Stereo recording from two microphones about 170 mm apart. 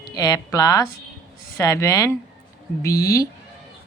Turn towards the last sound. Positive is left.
turn(degrees=20)  # may be behind; listen again after turning